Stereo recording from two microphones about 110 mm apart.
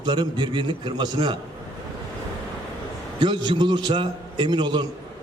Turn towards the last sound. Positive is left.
turn(degrees=-45)  # may be behind; listen again after turning